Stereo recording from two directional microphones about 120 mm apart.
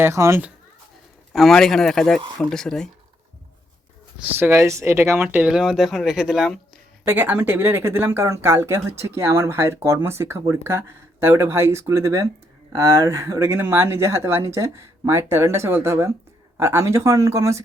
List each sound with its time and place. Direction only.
0.0 s speech: 25° right (ahead or behind)
1.3 s speech: centre (ahead or behind)
4.2 s speech: 20° right (ahead or behind); by 6.6 s 5° right (ahead or behind)
7.0 s speech: 20° right (ahead or behind)